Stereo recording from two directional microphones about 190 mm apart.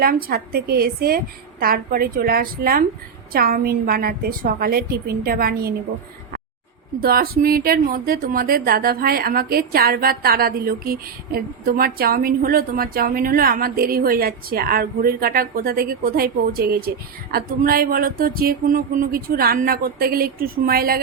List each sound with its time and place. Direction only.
0.0 s speech: 50° right (ahead or behind)
7.0 s speech: 50° right (ahead or behind)